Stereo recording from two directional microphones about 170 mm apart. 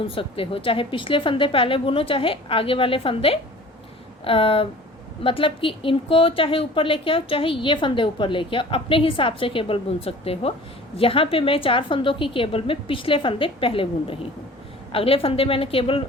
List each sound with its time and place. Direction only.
0.0 s a woman's voice: 30° left (ahead or behind)